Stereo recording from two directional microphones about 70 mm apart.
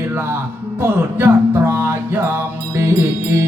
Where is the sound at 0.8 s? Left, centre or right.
Right.